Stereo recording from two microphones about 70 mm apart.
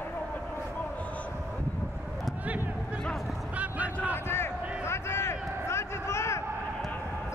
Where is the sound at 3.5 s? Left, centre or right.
Right.